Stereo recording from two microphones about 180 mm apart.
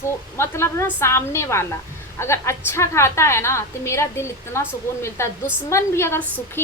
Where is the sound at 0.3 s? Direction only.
15° left (ahead or behind).